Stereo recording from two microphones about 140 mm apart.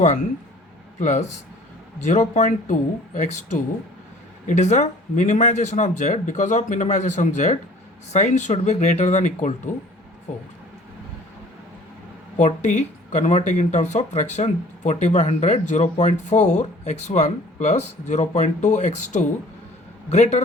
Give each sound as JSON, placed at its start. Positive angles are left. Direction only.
{"t": 0.9, "sound": "speech", "side_deg": 60}
{"t": 12.4, "sound": "speech", "side_deg": 60}